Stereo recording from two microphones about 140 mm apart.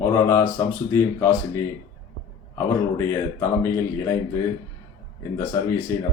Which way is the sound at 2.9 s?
20° left (ahead or behind).